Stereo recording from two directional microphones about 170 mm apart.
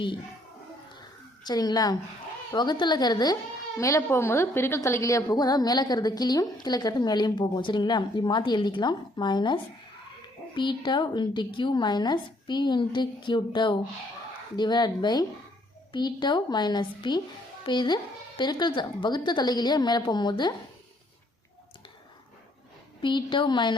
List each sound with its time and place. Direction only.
1.5 s a woman's voice: 25° left (ahead or behind)
23.0 s a woman's voice: 30° left (ahead or behind)